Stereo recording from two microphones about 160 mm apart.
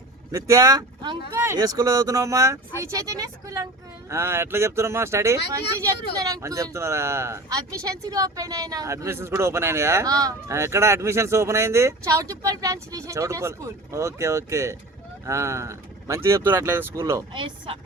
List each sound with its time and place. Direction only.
0.3 s speech: 20° right (ahead or behind)
17.3 s speech: 30° right (ahead or behind)